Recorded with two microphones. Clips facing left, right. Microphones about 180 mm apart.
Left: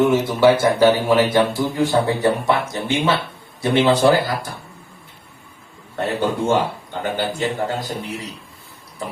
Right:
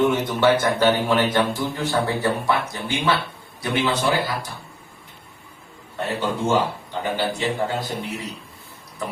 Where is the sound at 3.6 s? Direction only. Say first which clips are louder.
Left 7 dB; 30° left (ahead or behind).